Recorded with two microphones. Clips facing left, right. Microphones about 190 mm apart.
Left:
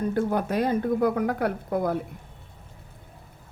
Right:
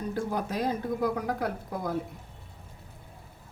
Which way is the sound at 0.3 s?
60° left (ahead or behind).